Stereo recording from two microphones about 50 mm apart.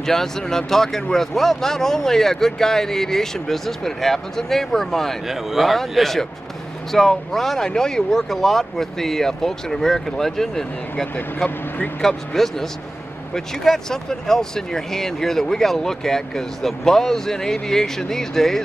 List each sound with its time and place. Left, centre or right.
0.0 s speech: centre
5.3 s speech: centre
8.2 s speech: centre
11.3 s speech: left
12.0 s speech: centre